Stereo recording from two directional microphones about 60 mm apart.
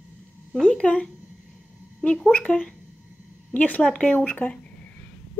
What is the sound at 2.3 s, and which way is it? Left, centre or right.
Speech, left.